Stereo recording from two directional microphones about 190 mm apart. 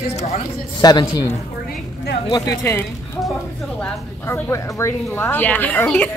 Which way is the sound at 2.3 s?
15° left (ahead or behind).